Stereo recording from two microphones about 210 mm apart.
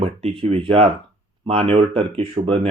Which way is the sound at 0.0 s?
30° right (ahead or behind).